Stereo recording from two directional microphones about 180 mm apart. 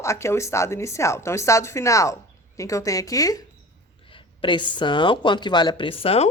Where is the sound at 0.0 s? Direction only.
15° left (ahead or behind).